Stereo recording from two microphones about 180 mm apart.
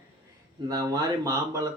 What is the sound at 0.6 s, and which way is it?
Speech, 20° right (ahead or behind).